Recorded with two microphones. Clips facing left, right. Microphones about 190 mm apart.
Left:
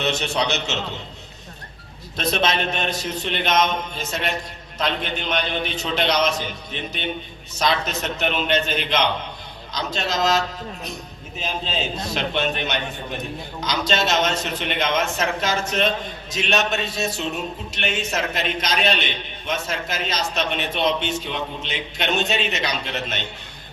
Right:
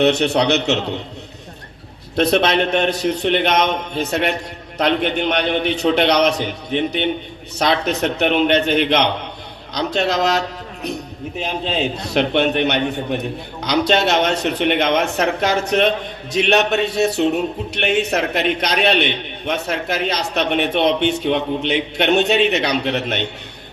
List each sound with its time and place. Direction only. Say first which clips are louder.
0.0 s a man's voice: right 8 dB; 60° right (ahead or behind)
2.1 s a man's voice: right 7 dB; 60° right (ahead or behind)